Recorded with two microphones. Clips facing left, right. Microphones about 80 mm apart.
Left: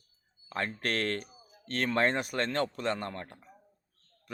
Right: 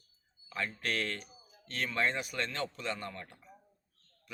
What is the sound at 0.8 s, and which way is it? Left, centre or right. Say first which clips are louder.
Speech: left 5 dB; left.